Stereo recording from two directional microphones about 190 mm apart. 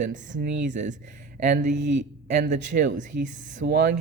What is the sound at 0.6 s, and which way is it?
Speech, 40° right (ahead or behind).